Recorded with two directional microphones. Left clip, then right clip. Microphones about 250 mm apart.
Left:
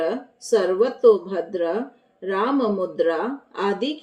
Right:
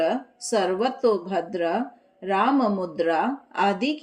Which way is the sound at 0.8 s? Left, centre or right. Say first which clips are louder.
Left 6 dB; right.